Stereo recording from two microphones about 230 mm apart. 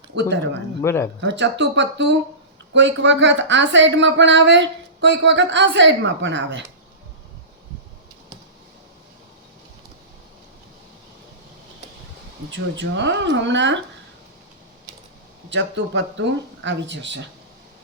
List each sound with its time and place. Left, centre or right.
0.8 s speech: centre
1.2 s speech: right
12.5 s speech: right
15.4 s speech: right